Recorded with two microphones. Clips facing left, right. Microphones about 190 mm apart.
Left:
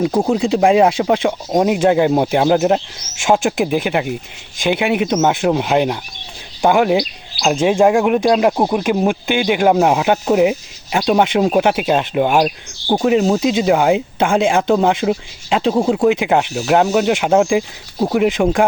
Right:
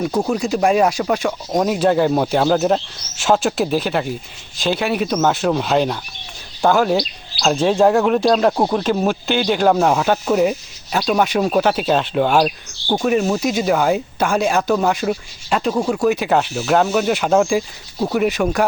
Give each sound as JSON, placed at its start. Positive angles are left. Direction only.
{"t": 0.1, "sound": "speech", "side_deg": 25}
{"t": 0.3, "sound": "speech", "side_deg": 90}
{"t": 0.6, "sound": "speech", "side_deg": 20}
{"t": 1.5, "sound": "speech", "side_deg": 15}